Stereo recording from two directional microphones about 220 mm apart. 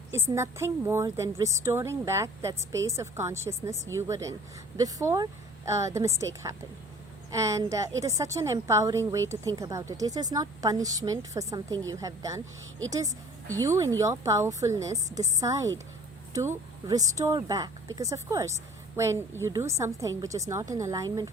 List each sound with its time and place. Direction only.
0.1 s a woman's voice: 10° right (ahead or behind)